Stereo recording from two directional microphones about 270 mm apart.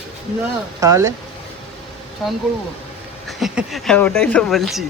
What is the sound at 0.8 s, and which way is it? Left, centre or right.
Speech, centre.